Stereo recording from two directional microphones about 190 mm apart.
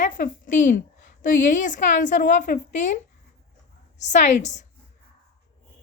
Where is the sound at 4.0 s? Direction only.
40° left (ahead or behind).